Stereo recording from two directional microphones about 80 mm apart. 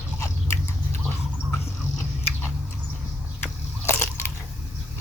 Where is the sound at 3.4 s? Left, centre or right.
Left.